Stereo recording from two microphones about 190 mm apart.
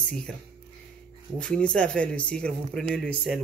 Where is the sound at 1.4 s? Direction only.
5° left (ahead or behind).